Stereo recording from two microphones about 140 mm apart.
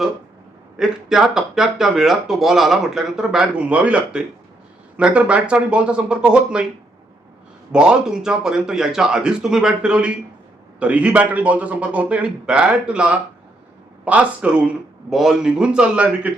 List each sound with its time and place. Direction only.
0.8 s a man's voice: 5° right (ahead or behind)
7.7 s a man's voice: 5° right (ahead or behind)